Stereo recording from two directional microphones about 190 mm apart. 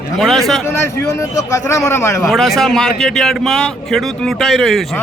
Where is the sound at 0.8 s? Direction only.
15° left (ahead or behind).